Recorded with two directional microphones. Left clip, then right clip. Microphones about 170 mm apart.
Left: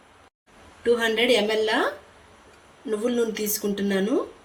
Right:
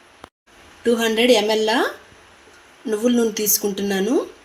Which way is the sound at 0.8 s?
50° right (ahead or behind).